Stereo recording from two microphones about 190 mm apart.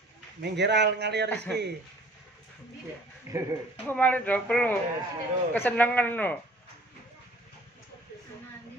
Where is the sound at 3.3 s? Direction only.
15° right (ahead or behind).